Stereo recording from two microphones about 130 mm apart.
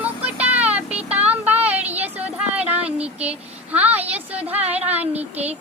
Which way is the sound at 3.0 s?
10° right (ahead or behind).